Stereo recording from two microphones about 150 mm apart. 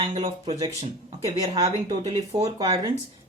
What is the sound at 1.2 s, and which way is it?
Speech, 25° right (ahead or behind).